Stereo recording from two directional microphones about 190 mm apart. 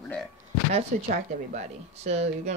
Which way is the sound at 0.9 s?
40° right (ahead or behind).